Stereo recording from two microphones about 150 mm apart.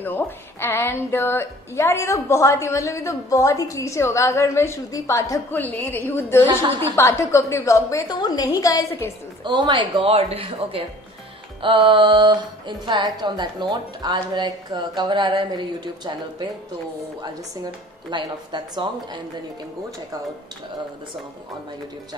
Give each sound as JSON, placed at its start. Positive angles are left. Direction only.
{"t": 0.0, "sound": "a woman's voice", "side_deg": 15}
{"t": 9.4, "sound": "speech", "side_deg": -30}
{"t": 11.9, "sound": "speech", "side_deg": -30}
{"t": 18.1, "sound": "speech", "side_deg": -30}